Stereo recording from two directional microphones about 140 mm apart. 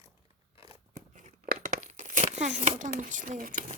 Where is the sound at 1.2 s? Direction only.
75° right (ahead or behind).